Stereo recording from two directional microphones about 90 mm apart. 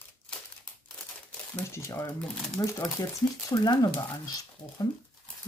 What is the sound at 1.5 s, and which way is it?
Speech, 30° left (ahead or behind).